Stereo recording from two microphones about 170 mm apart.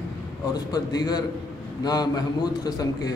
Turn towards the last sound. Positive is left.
turn(degrees=20)  # may be behind; listen again after turning